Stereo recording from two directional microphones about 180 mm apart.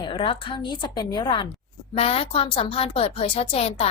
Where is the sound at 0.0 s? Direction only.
25° left (ahead or behind).